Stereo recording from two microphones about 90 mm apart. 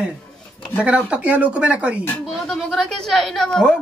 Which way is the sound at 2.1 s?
5° left (ahead or behind).